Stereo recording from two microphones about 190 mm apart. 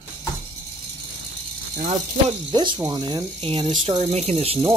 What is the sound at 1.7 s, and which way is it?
Speech, 40° right (ahead or behind).